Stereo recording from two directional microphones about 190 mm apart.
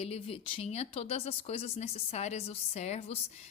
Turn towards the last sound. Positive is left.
turn(degrees=35)  # may be behind; listen again after turning